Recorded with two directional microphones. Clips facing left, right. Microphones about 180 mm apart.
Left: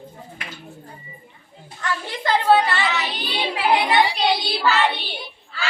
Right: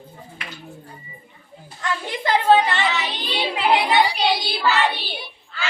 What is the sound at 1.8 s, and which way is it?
Child singing, 15° right (ahead or behind).